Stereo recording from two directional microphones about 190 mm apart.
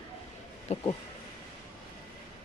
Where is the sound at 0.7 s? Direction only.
35° left (ahead or behind).